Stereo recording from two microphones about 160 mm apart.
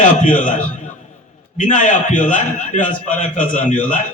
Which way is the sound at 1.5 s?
50° left (ahead or behind).